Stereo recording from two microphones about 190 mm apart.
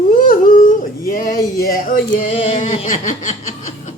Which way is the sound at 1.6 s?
45° left (ahead or behind).